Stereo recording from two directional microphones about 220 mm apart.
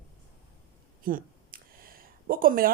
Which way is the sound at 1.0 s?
40° right (ahead or behind).